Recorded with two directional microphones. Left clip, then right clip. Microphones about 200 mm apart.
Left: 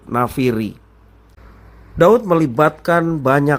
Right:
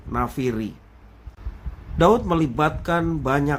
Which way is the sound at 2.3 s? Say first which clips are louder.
Left 7 dB; 25° left (ahead or behind).